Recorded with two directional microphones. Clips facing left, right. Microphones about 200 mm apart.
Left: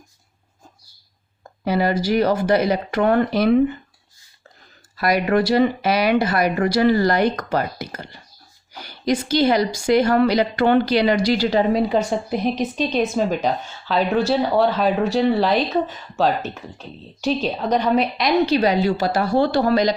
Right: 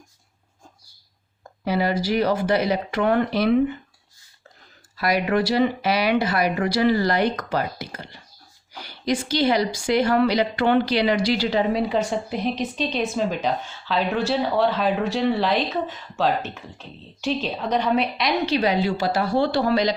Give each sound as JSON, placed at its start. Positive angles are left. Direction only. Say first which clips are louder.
{"t": 1.6, "sound": "speech", "louder": "left 3 dB", "side_deg": 45}
{"t": 4.9, "sound": "speech", "louder": "left 3 dB", "side_deg": 45}